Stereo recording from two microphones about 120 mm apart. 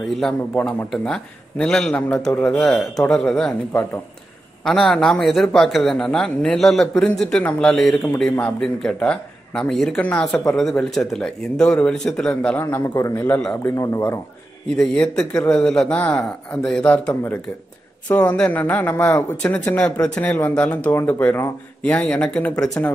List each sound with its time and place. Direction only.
0.2 s speech: 5° left (ahead or behind)
2.6 s speech: centre (ahead or behind); by 13.2 s 25° left (ahead or behind)
13.2 s speech: 10° left (ahead or behind)
13.7 s speech: 25° left (ahead or behind)
14.8 s speech: 5° left (ahead or behind)